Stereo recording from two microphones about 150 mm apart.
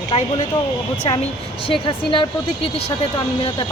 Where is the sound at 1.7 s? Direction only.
35° left (ahead or behind).